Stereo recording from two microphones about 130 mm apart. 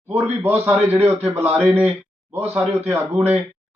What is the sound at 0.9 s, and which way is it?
Speech, 15° right (ahead or behind).